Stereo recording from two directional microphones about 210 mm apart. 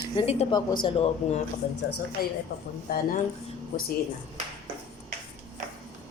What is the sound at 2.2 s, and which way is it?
Speech, 45° left (ahead or behind).